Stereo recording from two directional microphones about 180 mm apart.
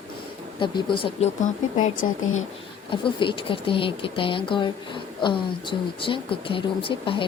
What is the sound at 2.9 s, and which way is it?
Speech, 25° left (ahead or behind).